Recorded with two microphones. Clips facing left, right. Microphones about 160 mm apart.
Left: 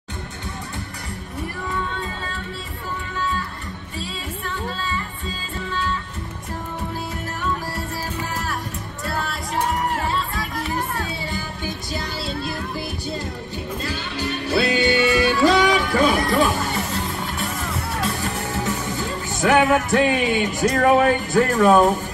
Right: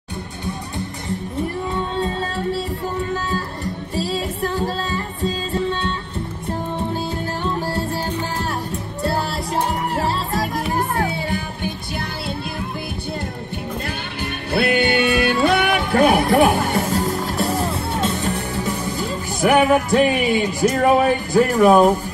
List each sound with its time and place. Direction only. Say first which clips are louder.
1.7 s music: right 5 dB; 35° right (ahead or behind)
11.0 s music: right 6 dB; 60° right (ahead or behind)
13.8 s music: left 1 dB; 55° right (ahead or behind); by 20.6 s 10° right (ahead or behind)
20.8 s speech: left 1 dB; 15° right (ahead or behind)